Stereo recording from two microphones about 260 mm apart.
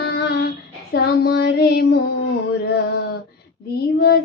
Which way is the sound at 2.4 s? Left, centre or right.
Left.